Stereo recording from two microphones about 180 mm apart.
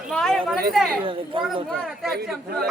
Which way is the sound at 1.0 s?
30° right (ahead or behind).